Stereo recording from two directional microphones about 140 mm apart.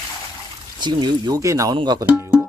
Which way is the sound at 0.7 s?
30° right (ahead or behind).